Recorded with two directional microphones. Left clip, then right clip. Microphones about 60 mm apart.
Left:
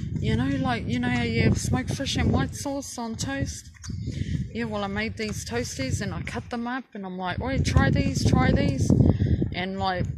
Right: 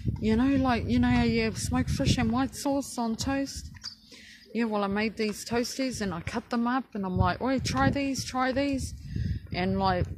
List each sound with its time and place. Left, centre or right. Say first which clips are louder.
0.2 s speech: right 2 dB; right
1.7 s speech: left 1 dB; right
2.3 s speech: even; right
7.1 s speech: right 2 dB; right
7.4 s speech: left 1 dB; right